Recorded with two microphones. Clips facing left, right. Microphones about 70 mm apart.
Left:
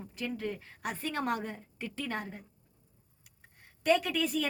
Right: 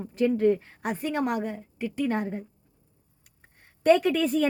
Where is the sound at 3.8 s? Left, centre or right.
Right.